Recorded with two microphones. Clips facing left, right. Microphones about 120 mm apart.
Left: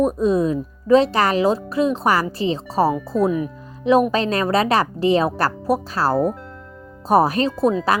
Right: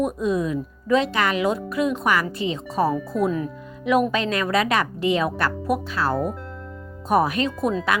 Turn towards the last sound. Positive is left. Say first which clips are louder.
# left 4 dB
turn(degrees=35)  # may be behind; listen again after turning